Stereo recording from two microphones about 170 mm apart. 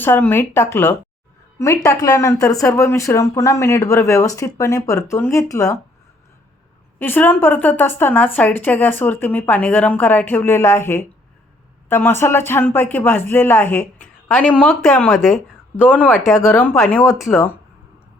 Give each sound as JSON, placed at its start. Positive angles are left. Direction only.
{"t": 0.0, "sound": "speech", "side_deg": 10}
{"t": 7.0, "sound": "speech", "side_deg": 10}